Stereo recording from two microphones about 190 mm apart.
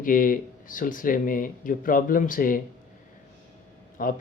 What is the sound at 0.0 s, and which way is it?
Speech, 45° left (ahead or behind).